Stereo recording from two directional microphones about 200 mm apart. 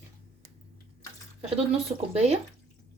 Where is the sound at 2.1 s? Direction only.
30° right (ahead or behind).